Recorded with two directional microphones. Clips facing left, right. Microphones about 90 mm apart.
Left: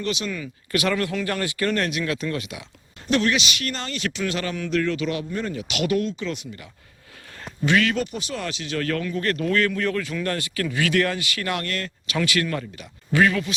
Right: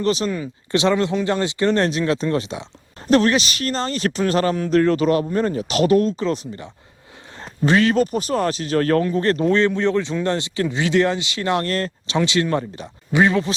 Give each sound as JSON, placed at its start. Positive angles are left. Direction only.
{"t": 0.0, "sound": "speech", "side_deg": -35}